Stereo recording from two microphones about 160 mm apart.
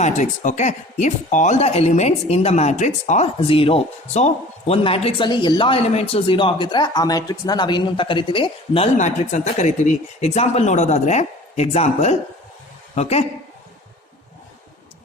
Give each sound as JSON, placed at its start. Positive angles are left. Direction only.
{"t": 0.0, "sound": "speech", "side_deg": 50}
{"t": 3.4, "sound": "speech", "side_deg": 35}
{"t": 9.0, "sound": "speech", "side_deg": 45}